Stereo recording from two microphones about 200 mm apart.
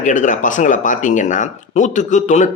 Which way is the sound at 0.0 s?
40° left (ahead or behind).